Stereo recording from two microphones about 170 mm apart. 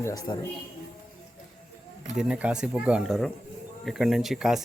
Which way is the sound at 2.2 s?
5° right (ahead or behind).